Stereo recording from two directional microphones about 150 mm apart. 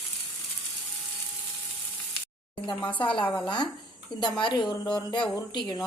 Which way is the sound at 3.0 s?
35° left (ahead or behind).